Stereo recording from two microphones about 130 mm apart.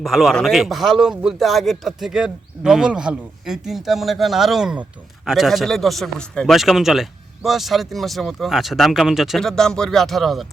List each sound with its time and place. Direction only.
0.0 s speech: centre (ahead or behind)